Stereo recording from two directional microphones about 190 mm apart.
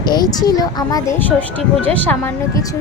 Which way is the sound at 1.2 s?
10° left (ahead or behind).